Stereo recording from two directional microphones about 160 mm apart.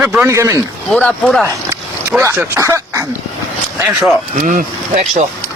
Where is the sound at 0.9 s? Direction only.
5° left (ahead or behind).